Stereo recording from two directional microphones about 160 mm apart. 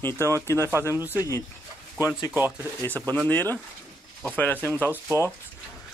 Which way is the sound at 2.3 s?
15° right (ahead or behind).